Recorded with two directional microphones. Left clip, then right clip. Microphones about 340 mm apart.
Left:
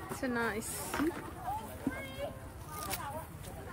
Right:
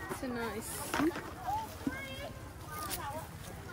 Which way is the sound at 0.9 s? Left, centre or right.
Right.